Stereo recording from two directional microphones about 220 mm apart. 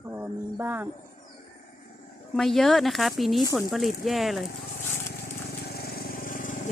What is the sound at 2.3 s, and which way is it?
Speech, centre (ahead or behind).